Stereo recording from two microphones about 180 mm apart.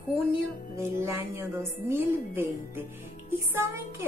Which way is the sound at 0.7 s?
15° right (ahead or behind).